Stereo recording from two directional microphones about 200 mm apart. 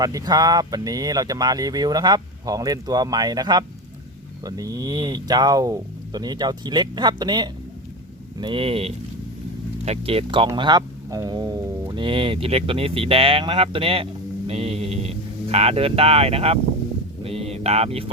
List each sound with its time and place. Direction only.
0.0 s speech: 20° right (ahead or behind)